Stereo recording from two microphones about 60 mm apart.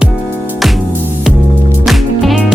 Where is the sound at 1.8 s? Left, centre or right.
Centre.